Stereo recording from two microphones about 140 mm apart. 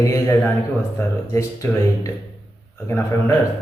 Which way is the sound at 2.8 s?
20° left (ahead or behind).